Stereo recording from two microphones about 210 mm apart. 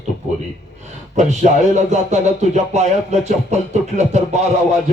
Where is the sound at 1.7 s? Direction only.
35° right (ahead or behind).